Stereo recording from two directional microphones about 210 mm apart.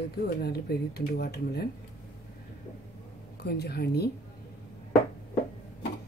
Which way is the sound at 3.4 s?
50° left (ahead or behind).